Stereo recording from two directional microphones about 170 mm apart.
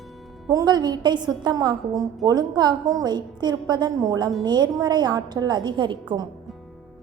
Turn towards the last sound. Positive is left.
turn(degrees=-25)  # may be behind; listen again after turning